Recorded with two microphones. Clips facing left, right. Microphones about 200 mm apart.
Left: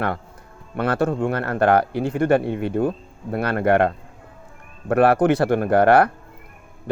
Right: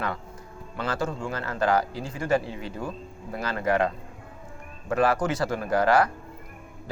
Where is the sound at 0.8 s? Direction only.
60° left (ahead or behind).